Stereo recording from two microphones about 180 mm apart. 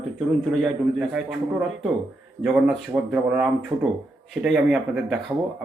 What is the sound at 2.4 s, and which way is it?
A man's voice, centre (ahead or behind).